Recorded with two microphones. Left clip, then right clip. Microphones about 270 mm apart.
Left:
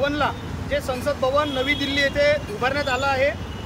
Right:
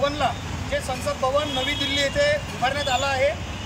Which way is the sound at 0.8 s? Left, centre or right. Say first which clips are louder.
Left 2 dB; centre.